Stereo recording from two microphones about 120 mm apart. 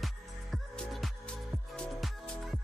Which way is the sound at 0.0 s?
Centre (ahead or behind).